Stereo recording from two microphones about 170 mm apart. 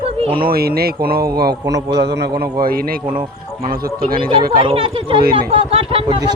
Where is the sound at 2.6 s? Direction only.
60° right (ahead or behind).